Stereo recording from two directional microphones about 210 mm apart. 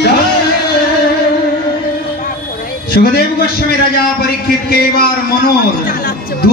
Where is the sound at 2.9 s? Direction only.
50° left (ahead or behind).